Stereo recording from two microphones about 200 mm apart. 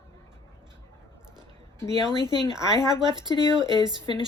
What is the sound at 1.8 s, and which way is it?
Speech, 20° right (ahead or behind).